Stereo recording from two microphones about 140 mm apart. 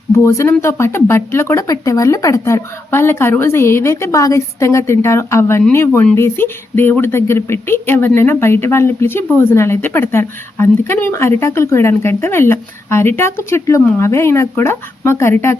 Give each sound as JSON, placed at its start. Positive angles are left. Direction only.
{"t": 0.1, "sound": "speech", "side_deg": 20}